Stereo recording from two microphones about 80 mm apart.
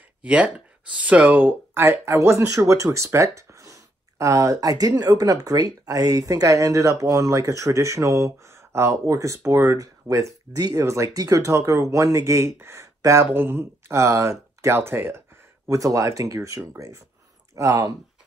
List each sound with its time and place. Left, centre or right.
0.2 s speech: centre; by 9.8 s right
9.8 s speech: right